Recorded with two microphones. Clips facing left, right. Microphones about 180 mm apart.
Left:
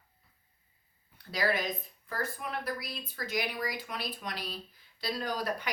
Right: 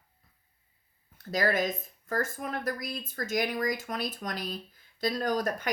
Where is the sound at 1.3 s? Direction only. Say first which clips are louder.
Right 4 dB; 45° right (ahead or behind).